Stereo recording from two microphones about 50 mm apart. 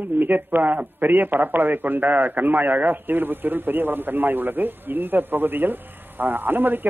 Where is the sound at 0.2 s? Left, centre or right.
Right.